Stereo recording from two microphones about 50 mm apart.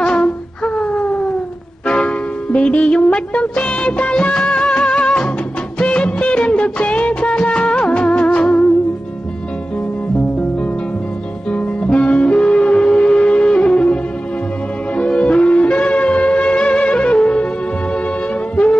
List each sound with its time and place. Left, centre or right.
0.0 s wind instrument: centre
0.7 s wail: left
1.9 s music: left
11.5 s music: left
15.0 s shofar: left